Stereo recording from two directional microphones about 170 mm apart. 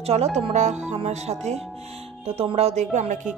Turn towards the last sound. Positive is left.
turn(degrees=-45)  # may be behind; listen again after turning